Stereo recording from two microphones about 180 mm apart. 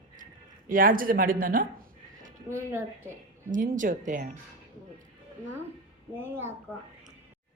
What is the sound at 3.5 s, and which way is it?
Speech, 45° right (ahead or behind).